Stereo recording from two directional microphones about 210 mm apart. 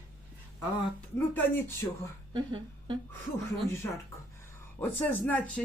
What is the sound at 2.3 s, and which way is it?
Speech, 20° right (ahead or behind).